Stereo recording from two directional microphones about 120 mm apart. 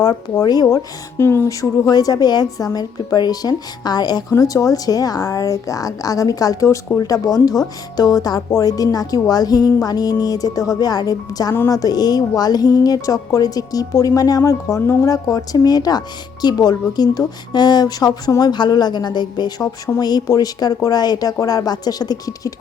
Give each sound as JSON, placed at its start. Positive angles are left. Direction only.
{"t": 0.0, "sound": "a woman's voice", "side_deg": 35}
{"t": 1.2, "sound": "a woman's voice", "side_deg": 20}